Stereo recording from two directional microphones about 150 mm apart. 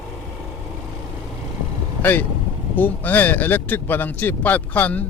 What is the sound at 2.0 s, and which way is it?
Speech, 10° left (ahead or behind).